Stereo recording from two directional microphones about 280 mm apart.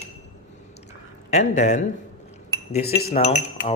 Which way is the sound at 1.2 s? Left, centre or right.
Left.